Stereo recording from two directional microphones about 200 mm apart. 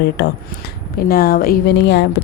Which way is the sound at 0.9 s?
50° left (ahead or behind).